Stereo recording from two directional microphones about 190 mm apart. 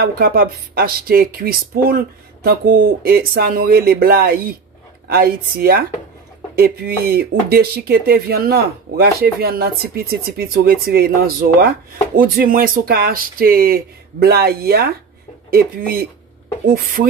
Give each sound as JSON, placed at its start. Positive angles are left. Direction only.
{"t": 0.0, "sound": "speech", "side_deg": -50}